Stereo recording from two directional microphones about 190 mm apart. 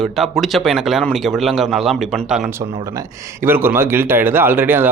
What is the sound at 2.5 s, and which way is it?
A man's voice, 15° right (ahead or behind).